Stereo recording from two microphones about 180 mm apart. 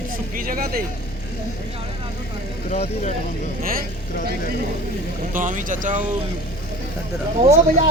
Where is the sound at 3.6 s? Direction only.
55° right (ahead or behind).